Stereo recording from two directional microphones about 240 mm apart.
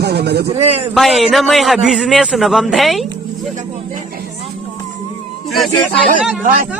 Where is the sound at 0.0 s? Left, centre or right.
Right.